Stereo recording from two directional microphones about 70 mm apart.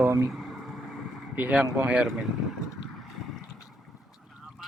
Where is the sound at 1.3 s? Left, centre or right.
Centre.